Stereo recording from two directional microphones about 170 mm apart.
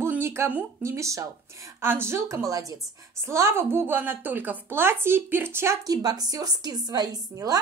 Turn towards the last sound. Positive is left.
turn(degrees=-20)  # may be behind; listen again after turning